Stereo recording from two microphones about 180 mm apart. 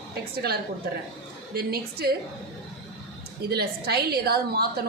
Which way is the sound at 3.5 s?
65° right (ahead or behind).